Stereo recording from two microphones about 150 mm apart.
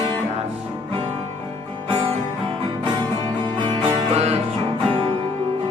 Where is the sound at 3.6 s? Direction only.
40° right (ahead or behind).